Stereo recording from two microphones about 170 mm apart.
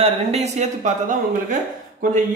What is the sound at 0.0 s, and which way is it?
Speech, 40° right (ahead or behind).